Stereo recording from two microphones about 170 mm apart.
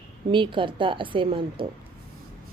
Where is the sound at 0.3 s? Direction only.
30° right (ahead or behind).